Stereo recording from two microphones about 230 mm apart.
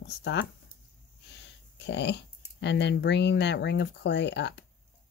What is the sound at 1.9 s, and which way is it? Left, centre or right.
Speech, left.